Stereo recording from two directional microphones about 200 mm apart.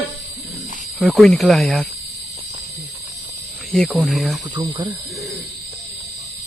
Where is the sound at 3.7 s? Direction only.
Centre (ahead or behind).